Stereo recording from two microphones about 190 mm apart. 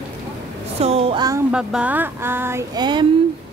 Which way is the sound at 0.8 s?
30° right (ahead or behind).